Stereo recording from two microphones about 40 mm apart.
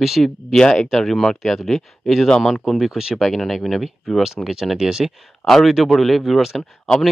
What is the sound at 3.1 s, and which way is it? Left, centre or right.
Speech, centre.